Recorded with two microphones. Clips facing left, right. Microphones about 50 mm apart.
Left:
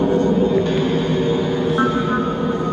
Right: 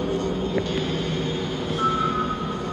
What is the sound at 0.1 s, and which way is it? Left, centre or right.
Music, left.